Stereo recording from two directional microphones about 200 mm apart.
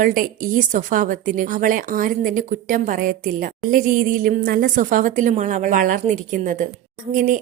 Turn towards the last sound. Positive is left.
turn(degrees=-40)  # may be behind; listen again after turning